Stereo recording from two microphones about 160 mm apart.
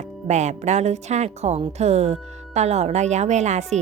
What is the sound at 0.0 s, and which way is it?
Speech, 45° right (ahead or behind).